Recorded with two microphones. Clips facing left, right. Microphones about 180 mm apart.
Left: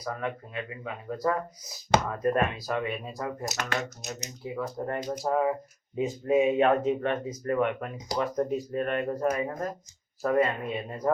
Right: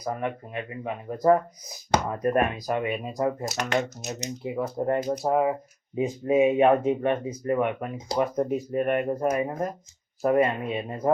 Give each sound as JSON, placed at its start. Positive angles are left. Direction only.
{"t": 0.0, "sound": "speech", "side_deg": -20}